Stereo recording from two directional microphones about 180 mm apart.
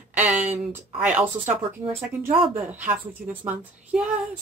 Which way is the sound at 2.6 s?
10° right (ahead or behind).